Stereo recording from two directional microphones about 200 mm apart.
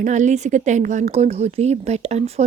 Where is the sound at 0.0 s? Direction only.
40° right (ahead or behind).